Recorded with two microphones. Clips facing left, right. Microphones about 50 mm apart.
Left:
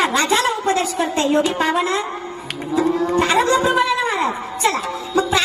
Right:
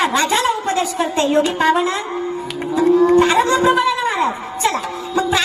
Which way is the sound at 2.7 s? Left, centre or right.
Right.